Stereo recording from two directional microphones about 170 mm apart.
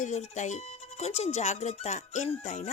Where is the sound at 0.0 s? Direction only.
45° left (ahead or behind).